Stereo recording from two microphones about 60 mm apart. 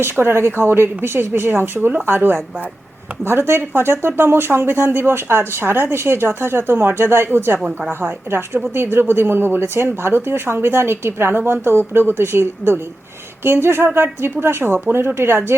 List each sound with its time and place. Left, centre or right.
0.0 s speech: right